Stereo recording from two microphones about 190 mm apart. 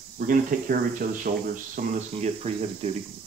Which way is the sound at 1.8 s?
35° right (ahead or behind).